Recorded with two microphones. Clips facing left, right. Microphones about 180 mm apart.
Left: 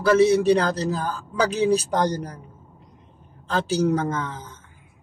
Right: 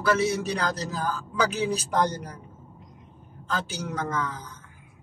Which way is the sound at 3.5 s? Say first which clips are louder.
Left 10 dB; 30° left (ahead or behind).